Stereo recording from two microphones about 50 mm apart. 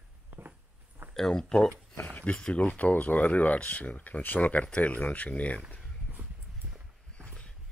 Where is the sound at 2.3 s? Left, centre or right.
Left.